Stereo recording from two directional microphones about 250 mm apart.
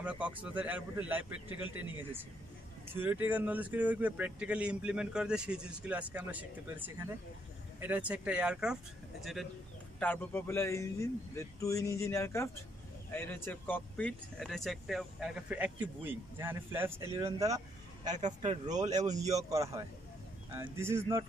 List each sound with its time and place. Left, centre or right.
0.0 s a man's voice: centre
2.9 s a man's voice: centre
18.2 s speech: right
18.7 s a man's voice: centre